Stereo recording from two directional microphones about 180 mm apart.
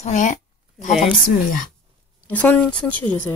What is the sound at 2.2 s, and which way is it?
Speech, 10° left (ahead or behind).